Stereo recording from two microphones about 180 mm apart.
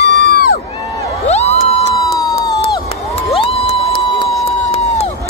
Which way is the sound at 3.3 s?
30° left (ahead or behind).